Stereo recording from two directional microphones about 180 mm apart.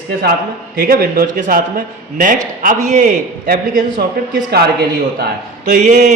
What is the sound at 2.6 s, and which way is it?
A man's voice, 45° right (ahead or behind).